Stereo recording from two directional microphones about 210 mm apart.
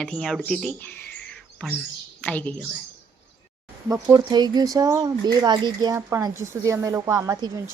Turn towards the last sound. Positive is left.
turn(degrees=-15)  # may be behind; listen again after turning